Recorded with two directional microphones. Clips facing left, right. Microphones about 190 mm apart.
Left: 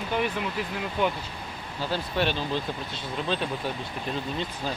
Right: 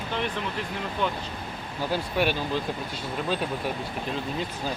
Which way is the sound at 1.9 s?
10° right (ahead or behind).